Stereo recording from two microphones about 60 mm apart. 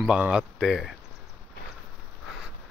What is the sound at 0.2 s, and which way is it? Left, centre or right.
Speech, centre.